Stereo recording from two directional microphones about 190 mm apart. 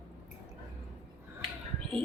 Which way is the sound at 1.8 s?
30° right (ahead or behind).